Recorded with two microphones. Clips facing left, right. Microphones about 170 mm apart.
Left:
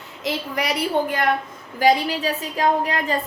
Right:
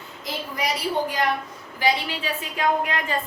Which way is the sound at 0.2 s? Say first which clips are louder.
Left 4 dB; 70° left (ahead or behind).